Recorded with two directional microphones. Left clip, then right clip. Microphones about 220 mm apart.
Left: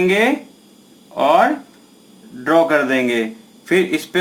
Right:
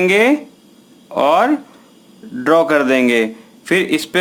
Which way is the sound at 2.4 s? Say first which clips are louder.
Right 2 dB; 40° right (ahead or behind).